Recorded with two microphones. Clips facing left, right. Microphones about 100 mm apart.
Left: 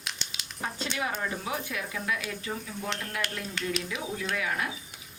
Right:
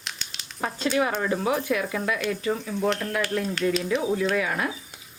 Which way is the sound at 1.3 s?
75° right (ahead or behind).